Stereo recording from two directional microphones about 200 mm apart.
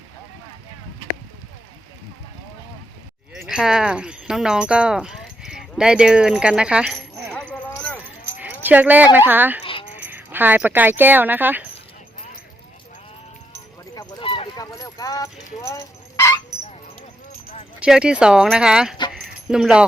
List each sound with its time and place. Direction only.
3.4 s a sound: 5° right (ahead or behind)
8.4 s a sound: 10° right (ahead or behind)
9.1 s speech: 10° right (ahead or behind)
13.9 s keys jangling: 20° left (ahead or behind)
17.7 s speech: 5° right (ahead or behind)
19.1 s keys jangling: 5° right (ahead or behind)